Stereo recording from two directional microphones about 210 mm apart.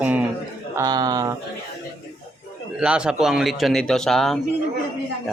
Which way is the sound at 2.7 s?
5° right (ahead or behind).